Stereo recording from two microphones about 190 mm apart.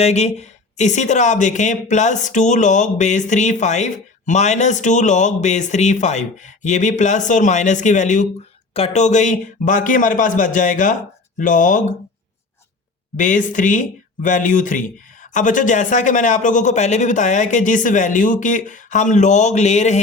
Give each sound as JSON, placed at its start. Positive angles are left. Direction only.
{"t": 0.0, "sound": "a man's voice", "side_deg": 35}
{"t": 13.1, "sound": "a man's voice", "side_deg": 40}